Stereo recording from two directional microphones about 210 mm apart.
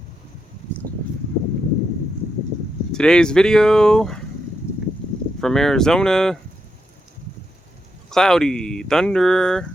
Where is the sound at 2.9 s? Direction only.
5° left (ahead or behind).